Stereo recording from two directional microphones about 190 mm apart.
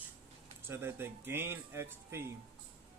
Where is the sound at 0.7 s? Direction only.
10° right (ahead or behind).